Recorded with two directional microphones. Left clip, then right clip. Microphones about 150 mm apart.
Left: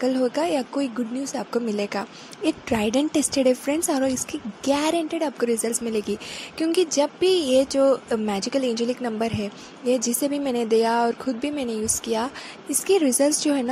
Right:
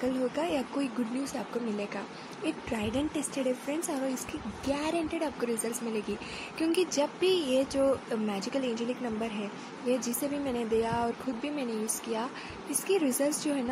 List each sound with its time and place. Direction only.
0.0 s speech: 50° left (ahead or behind)
1.8 s speech: 60° left (ahead or behind)